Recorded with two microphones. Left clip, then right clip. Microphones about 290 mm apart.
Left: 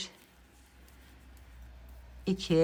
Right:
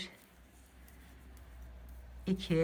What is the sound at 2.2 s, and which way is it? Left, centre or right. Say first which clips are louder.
Speech: left 6 dB; centre.